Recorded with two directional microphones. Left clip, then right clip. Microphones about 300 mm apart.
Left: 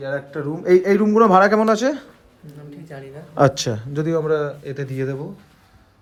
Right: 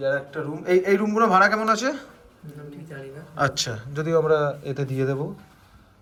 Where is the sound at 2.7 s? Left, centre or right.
Centre.